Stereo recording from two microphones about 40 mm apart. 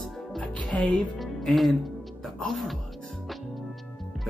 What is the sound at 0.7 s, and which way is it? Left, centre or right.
Speech, left.